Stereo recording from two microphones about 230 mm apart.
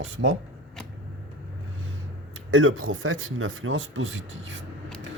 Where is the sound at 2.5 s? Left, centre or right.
Right.